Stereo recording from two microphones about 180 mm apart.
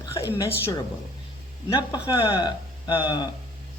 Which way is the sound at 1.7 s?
25° left (ahead or behind).